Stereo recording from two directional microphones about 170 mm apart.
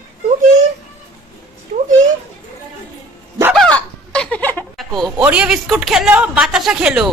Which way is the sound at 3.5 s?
5° left (ahead or behind).